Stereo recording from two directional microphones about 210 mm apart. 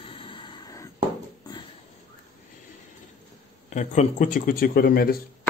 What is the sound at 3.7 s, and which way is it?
Speech, 35° left (ahead or behind).